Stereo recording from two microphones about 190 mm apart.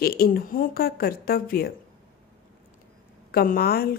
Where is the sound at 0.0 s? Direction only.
55° left (ahead or behind).